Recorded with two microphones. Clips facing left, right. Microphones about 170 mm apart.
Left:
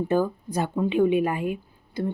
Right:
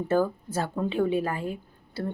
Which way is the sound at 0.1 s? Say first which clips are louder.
Right 2 dB; 15° left (ahead or behind).